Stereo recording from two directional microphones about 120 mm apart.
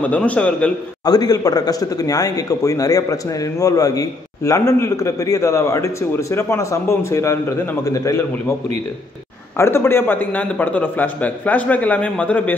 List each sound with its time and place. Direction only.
0.0 s a man's voice: 15° left (ahead or behind)
1.0 s speech: 30° left (ahead or behind)
9.6 s a man's voice: 20° left (ahead or behind)